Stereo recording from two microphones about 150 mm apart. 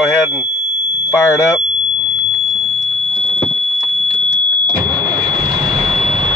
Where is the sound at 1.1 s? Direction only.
20° left (ahead or behind).